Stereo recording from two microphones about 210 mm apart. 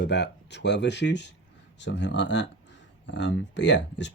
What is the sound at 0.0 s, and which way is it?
Speech, 55° left (ahead or behind).